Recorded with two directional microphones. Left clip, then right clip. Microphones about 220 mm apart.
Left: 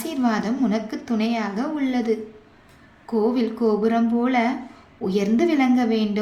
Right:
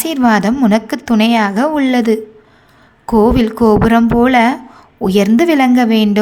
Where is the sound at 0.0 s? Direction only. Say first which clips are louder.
Right 11 dB; 35° right (ahead or behind).